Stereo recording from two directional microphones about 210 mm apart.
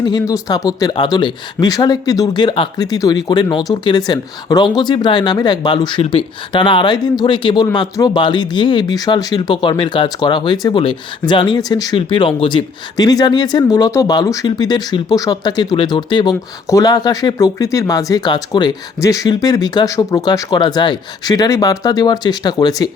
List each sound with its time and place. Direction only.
0.0 s speech: 15° left (ahead or behind)